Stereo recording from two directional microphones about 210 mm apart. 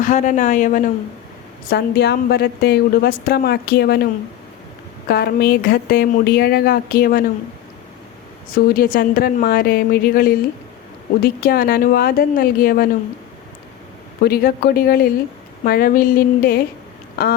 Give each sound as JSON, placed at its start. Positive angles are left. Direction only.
{"t": 0.0, "sound": "speech", "side_deg": 35}
{"t": 1.7, "sound": "a woman's voice", "side_deg": 50}
{"t": 8.5, "sound": "a woman's voice", "side_deg": 45}
{"t": 14.2, "sound": "a woman's voice", "side_deg": 45}